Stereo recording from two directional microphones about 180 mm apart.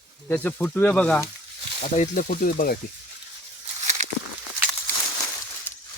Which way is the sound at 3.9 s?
40° right (ahead or behind).